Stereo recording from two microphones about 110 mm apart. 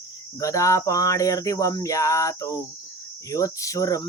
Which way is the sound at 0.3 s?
30° left (ahead or behind).